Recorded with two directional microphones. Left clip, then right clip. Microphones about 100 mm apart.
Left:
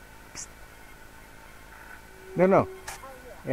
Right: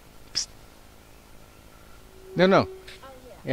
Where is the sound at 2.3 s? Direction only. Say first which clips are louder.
Right 1 dB; 35° right (ahead or behind).